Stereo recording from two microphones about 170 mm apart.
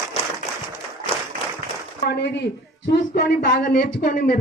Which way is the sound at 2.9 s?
65° left (ahead or behind).